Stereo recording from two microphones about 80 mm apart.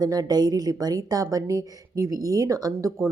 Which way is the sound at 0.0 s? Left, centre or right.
Right.